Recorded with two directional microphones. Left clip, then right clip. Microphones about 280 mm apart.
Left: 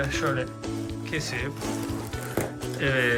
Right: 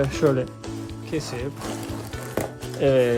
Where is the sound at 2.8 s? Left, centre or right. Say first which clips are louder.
Right 5 dB; centre.